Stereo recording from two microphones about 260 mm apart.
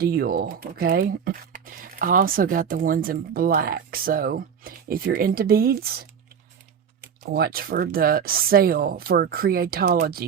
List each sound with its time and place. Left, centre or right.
0.0 s speech: right
7.2 s speech: right